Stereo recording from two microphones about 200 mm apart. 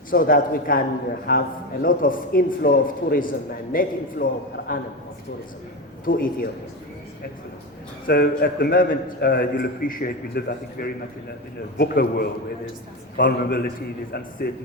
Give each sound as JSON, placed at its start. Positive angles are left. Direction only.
{"t": 0.1, "sound": "a man's voice", "side_deg": 45}
{"t": 6.1, "sound": "a man's voice", "side_deg": 45}
{"t": 8.0, "sound": "a man's voice", "side_deg": 50}